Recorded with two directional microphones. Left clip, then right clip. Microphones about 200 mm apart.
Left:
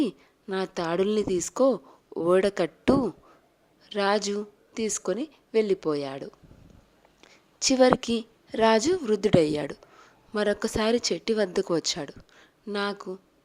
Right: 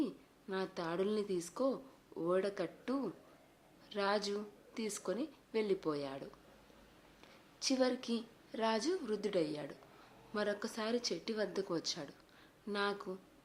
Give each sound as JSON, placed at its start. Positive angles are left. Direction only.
{"t": 0.0, "sound": "a woman's voice", "side_deg": 40}
{"t": 7.6, "sound": "a woman's voice", "side_deg": 40}